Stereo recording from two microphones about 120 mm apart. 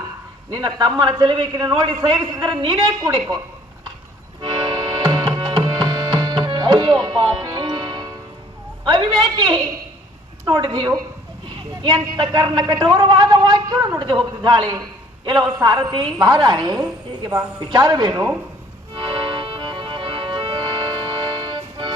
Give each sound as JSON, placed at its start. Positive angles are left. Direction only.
{"t": 0.5, "sound": "a man's voice", "side_deg": -35}
{"t": 4.4, "sound": "tabla", "side_deg": -40}
{"t": 8.8, "sound": "a woman's voice", "side_deg": -40}
{"t": 18.9, "sound": "music", "side_deg": -40}